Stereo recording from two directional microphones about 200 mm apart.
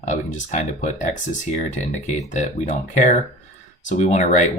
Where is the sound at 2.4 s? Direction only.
35° left (ahead or behind).